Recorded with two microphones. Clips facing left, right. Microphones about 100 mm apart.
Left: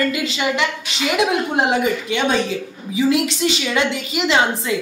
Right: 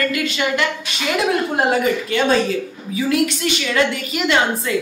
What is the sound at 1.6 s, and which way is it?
A woman's voice, 15° left (ahead or behind).